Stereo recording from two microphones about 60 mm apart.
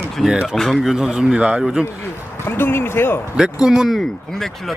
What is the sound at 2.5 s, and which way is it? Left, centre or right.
Speech, left.